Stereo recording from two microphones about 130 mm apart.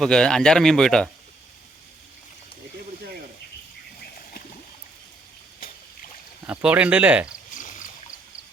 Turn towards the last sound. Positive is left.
turn(degrees=80)